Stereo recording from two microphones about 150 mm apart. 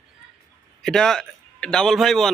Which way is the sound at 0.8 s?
5° left (ahead or behind).